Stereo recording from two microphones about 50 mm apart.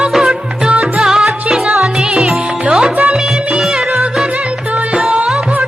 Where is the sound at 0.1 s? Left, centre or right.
Centre; by 3.2 s right.